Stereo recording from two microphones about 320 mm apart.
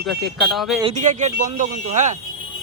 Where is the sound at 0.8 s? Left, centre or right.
Right.